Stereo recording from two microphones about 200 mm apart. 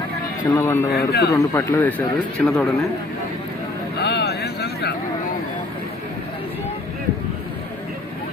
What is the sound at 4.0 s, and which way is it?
Vehicle, 55° left (ahead or behind).